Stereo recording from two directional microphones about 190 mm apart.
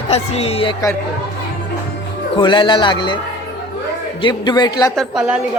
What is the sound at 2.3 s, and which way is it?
Speech, 25° left (ahead or behind).